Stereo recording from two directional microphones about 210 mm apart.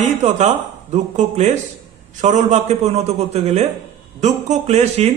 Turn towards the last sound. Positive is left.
turn(degrees=-30)  # may be behind; listen again after turning